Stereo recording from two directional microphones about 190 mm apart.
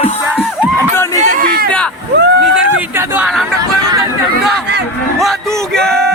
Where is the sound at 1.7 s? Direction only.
5° left (ahead or behind).